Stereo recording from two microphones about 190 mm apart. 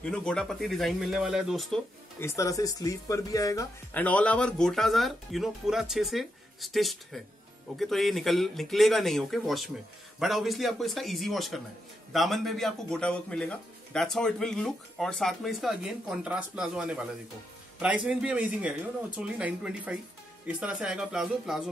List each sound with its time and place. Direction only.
0.0 s speech: 5° left (ahead or behind)
2.1 s speech: 15° left (ahead or behind); by 21.6 s 5° right (ahead or behind)